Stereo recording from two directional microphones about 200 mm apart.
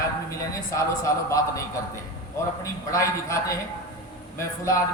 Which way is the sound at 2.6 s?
15° left (ahead or behind).